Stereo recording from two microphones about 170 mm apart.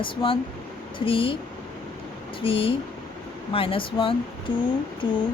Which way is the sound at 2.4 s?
30° left (ahead or behind).